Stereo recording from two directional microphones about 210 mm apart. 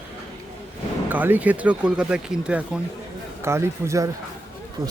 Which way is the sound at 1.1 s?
10° right (ahead or behind).